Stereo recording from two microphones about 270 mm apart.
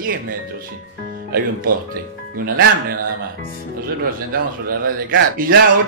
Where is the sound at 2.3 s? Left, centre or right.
Right.